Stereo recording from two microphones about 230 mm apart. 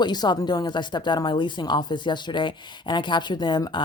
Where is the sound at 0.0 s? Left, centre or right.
Centre.